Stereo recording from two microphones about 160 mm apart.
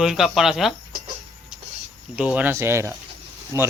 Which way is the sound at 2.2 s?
10° right (ahead or behind).